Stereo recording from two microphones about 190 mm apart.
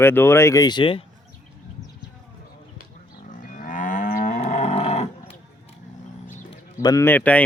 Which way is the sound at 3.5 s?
45° left (ahead or behind).